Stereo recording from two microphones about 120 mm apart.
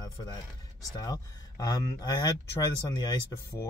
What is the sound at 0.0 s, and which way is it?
Music, 35° left (ahead or behind).